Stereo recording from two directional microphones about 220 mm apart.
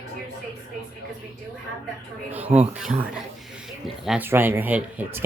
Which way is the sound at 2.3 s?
5° right (ahead or behind).